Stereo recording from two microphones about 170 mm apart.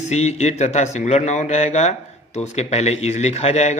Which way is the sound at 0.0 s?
40° left (ahead or behind).